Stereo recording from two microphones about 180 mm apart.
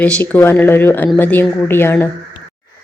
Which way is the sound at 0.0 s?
10° left (ahead or behind).